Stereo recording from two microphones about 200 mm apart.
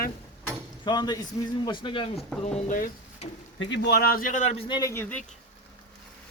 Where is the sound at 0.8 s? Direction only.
20° left (ahead or behind).